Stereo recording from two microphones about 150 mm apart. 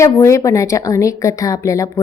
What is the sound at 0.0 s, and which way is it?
Speech, 20° left (ahead or behind).